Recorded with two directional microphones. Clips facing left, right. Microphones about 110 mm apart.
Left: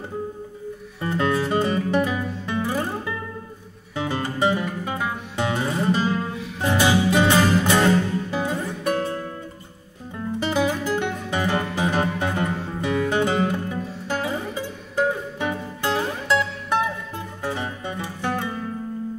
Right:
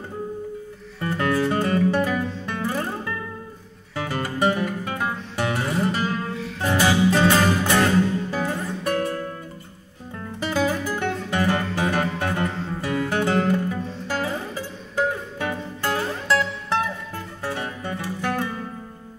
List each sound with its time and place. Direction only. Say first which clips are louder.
1.0 s music: even; 20° left (ahead or behind)
3.9 s music: left 1 dB; 20° left (ahead or behind)